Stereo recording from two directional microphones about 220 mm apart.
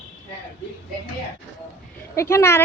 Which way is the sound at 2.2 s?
10° left (ahead or behind).